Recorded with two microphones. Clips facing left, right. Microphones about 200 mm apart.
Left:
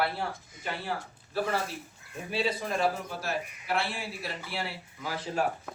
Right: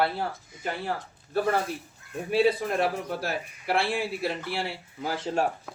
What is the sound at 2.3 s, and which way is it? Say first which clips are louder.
A man's voice: right 7 dB; 60° right (ahead or behind).